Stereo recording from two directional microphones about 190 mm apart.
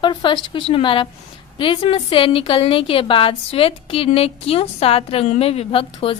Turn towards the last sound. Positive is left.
turn(degrees=30)  # may be behind; listen again after turning